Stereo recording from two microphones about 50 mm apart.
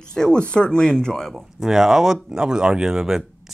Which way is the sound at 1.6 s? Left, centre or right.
Centre.